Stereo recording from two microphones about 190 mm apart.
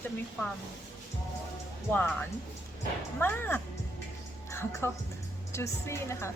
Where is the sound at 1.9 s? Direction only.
10° left (ahead or behind).